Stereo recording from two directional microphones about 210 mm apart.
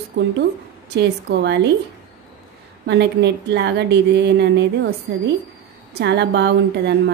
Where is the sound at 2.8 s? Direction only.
55° right (ahead or behind).